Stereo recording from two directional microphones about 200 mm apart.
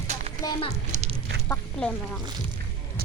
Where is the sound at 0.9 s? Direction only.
35° right (ahead or behind).